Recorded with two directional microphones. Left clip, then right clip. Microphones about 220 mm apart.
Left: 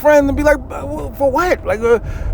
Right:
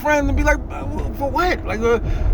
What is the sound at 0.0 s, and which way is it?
A man's voice, 25° left (ahead or behind).